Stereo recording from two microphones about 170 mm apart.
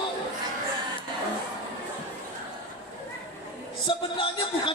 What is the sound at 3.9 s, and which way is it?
Speech, 30° left (ahead or behind).